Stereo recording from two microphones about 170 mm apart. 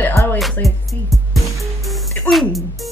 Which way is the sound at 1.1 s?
Centre (ahead or behind).